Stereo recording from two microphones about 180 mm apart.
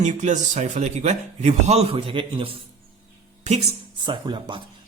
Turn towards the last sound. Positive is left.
turn(degrees=-25)  # may be behind; listen again after turning